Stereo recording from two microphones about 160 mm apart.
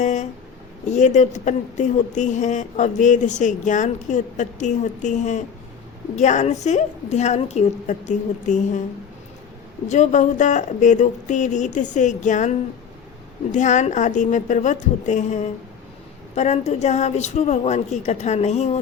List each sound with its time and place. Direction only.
0.0 s a sound: 45° left (ahead or behind)
0.9 s speech: 45° left (ahead or behind)
9.9 s speech: 50° left (ahead or behind)